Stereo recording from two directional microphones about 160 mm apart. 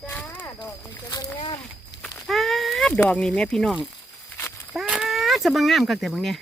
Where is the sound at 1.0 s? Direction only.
25° left (ahead or behind).